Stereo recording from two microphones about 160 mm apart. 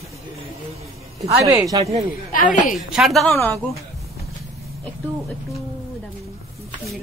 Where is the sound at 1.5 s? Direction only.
20° right (ahead or behind).